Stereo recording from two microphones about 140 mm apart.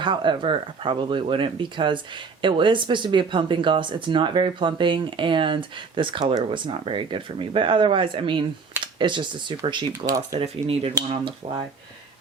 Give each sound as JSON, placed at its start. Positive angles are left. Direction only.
{"t": 0.0, "sound": "speech", "side_deg": -35}
{"t": 10.3, "sound": "speech", "side_deg": -45}